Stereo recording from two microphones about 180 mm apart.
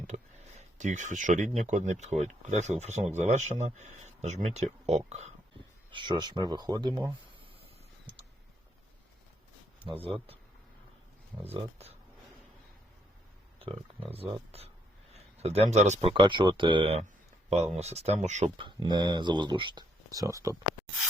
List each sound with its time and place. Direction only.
0.1 s speech: 40° right (ahead or behind)
5.9 s speech: 25° right (ahead or behind)
11.5 s speech: 35° right (ahead or behind)
13.6 s speech: 30° right (ahead or behind)